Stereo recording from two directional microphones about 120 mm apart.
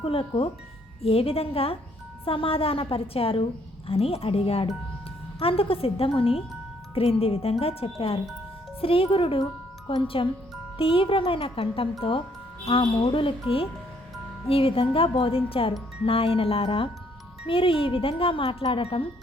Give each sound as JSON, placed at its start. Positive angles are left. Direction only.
{"t": 0.0, "sound": "speech", "side_deg": 50}